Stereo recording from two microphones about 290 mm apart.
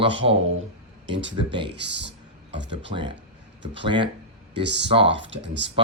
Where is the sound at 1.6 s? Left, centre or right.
Right.